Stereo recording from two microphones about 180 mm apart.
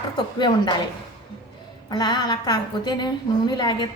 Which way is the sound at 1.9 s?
25° left (ahead or behind).